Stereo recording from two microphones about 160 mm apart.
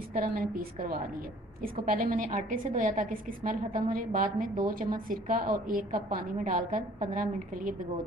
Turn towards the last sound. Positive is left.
turn(degrees=-60)  # may be behind; listen again after turning